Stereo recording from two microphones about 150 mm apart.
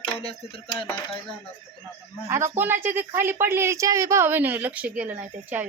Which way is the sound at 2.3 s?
15° right (ahead or behind).